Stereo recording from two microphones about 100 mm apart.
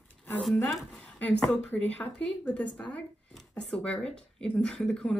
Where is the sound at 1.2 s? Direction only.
15° left (ahead or behind).